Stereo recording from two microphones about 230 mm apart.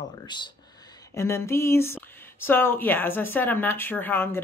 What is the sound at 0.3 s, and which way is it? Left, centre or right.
Speech, centre.